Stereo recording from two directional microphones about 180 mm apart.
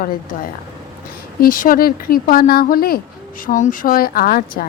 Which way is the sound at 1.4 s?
50° left (ahead or behind).